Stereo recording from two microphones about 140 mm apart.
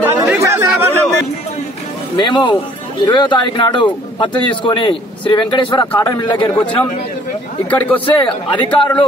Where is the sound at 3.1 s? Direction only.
35° left (ahead or behind).